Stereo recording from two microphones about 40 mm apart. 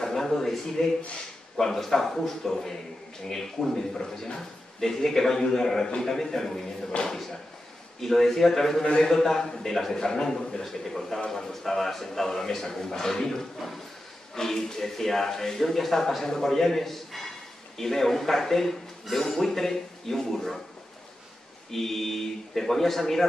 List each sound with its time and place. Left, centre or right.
0.0 s a man's voice: centre
21.6 s speech: centre